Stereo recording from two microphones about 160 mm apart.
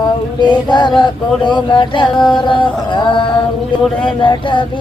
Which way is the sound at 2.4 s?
30° left (ahead or behind).